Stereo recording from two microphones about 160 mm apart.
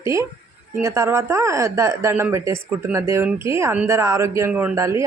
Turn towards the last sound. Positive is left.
turn(degrees=-20)  # may be behind; listen again after turning